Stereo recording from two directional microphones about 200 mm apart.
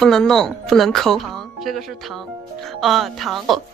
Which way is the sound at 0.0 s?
Centre (ahead or behind).